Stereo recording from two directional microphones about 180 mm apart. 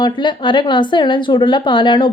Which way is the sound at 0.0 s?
25° left (ahead or behind).